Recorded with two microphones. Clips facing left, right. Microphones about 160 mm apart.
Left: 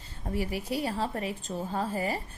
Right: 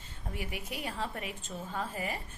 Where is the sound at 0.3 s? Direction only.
35° left (ahead or behind).